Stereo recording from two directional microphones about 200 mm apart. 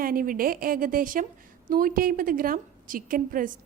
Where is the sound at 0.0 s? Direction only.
45° right (ahead or behind).